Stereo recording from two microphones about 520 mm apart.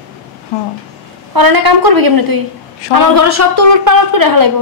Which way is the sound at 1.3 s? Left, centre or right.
Right.